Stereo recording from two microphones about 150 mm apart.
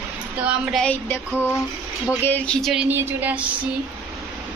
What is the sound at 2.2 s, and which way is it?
Speech, 10° left (ahead or behind).